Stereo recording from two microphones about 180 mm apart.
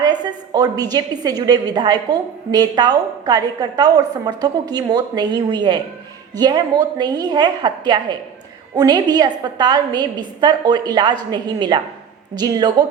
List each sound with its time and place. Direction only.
0.0 s a woman's voice: 20° right (ahead or behind)